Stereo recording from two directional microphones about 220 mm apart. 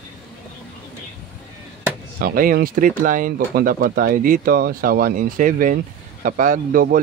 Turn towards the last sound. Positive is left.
turn(degrees=-40)  # may be behind; listen again after turning